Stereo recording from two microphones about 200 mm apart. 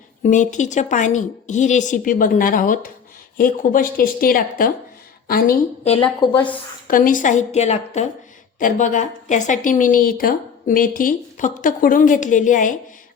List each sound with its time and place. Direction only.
0.2 s a woman's voice: 40° left (ahead or behind)
5.8 s a woman's voice: 25° left (ahead or behind)
6.8 s a woman's voice: 45° left (ahead or behind)